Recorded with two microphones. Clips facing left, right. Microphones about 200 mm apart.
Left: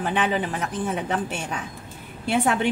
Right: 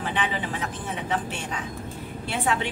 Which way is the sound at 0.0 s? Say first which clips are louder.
Left 5 dB; 45° left (ahead or behind).